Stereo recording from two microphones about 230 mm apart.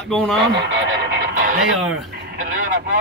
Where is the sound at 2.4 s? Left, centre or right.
Right.